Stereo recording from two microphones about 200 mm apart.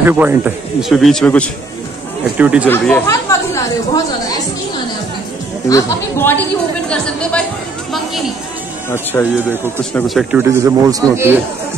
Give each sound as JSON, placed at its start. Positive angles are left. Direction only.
{"t": 0.0, "sound": "speech", "side_deg": -10}
{"t": 2.3, "sound": "speech", "side_deg": -5}
{"t": 2.7, "sound": "speech", "side_deg": 10}
{"t": 5.7, "sound": "speech", "side_deg": 15}
{"t": 8.9, "sound": "speech", "side_deg": 10}
{"t": 9.9, "sound": "speech", "side_deg": 0}
{"t": 10.4, "sound": "speech", "side_deg": -15}